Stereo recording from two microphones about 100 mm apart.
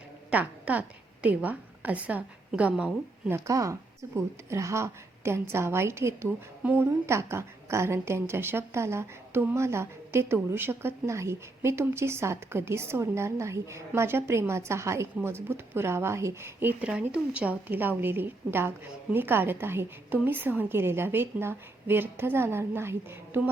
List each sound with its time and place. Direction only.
0.3 s a woman's voice: 15° right (ahead or behind)
3.2 s a woman's voice: 30° right (ahead or behind)